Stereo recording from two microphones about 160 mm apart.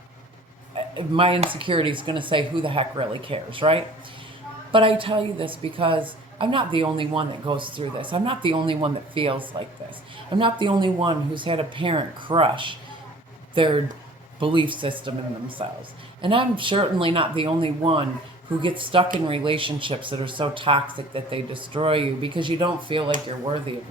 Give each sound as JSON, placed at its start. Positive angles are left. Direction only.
{"t": 0.7, "sound": "a woman's voice", "side_deg": -35}